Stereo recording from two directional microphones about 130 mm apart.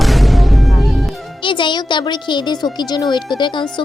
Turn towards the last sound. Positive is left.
turn(degrees=35)  # may be behind; listen again after turning